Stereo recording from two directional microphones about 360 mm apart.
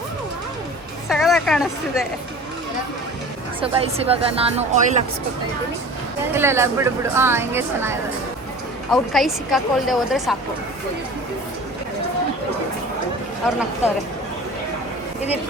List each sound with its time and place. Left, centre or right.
1.0 s speech: centre
3.6 s speech: centre
6.3 s speech: centre